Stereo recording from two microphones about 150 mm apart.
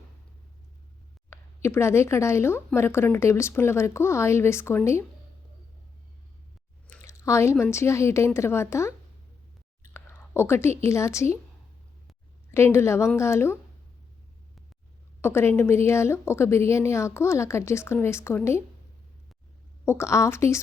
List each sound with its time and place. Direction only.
1.3 s a woman's voice: 20° left (ahead or behind)
6.9 s a sound: 20° left (ahead or behind)
7.6 s a woman's voice: 20° left (ahead or behind)
9.9 s whispering: 15° left (ahead or behind)
10.8 s a woman's voice: 20° left (ahead or behind)
12.5 s a woman's voice: 15° left (ahead or behind)
15.2 s a woman's voice: 15° left (ahead or behind)
19.8 s a woman's voice: 15° left (ahead or behind)